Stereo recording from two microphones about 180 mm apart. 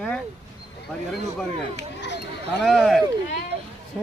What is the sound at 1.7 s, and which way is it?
Speech, 75° left (ahead or behind).